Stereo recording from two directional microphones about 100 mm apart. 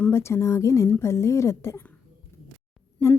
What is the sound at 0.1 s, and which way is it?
A woman's voice, 25° left (ahead or behind).